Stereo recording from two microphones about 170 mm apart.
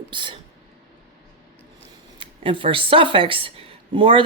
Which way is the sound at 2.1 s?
30° right (ahead or behind).